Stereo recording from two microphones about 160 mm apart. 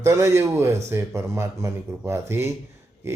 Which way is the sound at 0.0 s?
20° right (ahead or behind).